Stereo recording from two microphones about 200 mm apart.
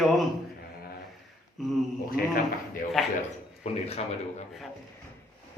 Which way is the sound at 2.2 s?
45° left (ahead or behind).